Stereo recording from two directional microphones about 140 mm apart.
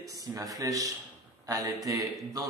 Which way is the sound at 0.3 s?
25° right (ahead or behind).